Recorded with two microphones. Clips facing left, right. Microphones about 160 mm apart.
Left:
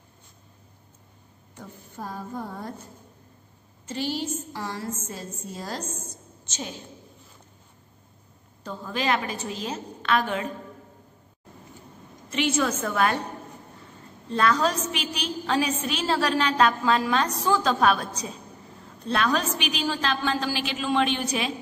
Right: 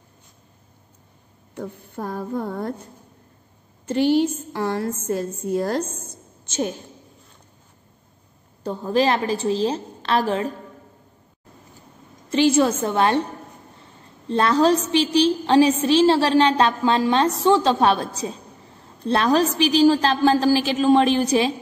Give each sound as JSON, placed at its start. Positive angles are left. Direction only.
{"t": 1.5, "sound": "a woman's voice", "side_deg": -60}
{"t": 3.8, "sound": "a woman's voice", "side_deg": -60}
{"t": 8.6, "sound": "a woman's voice", "side_deg": -35}
{"t": 12.3, "sound": "a woman's voice", "side_deg": -30}
{"t": 14.3, "sound": "a woman's voice", "side_deg": -30}